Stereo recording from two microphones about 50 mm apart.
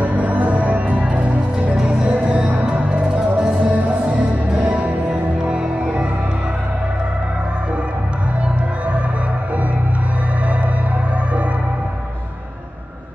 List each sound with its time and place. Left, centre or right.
0.0 s music: right